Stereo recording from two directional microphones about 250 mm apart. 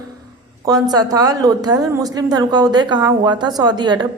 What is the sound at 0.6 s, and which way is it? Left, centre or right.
A woman's voice, centre.